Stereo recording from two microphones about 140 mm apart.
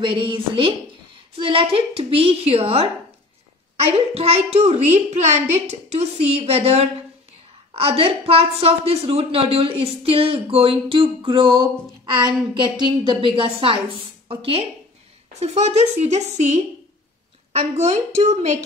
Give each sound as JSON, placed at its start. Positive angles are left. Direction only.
{"t": 0.0, "sound": "a woman's voice", "side_deg": -35}